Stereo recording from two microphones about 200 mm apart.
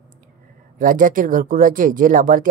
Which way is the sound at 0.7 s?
40° right (ahead or behind).